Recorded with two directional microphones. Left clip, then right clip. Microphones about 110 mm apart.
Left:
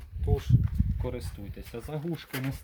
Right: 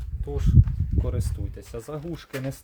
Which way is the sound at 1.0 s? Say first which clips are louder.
Right 2 dB; 40° right (ahead or behind).